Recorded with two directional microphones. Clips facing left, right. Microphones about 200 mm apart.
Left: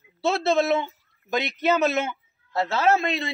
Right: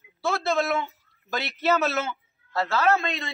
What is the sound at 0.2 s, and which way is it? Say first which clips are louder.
A man's voice: left 3 dB; 25° left (ahead or behind).